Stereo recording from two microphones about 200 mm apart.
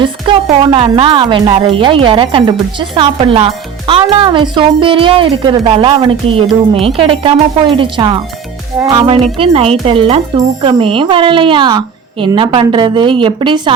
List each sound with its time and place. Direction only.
0.0 s speech: 25° right (ahead or behind)